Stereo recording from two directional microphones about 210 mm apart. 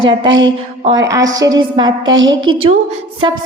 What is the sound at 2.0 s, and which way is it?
Speech, 65° right (ahead or behind).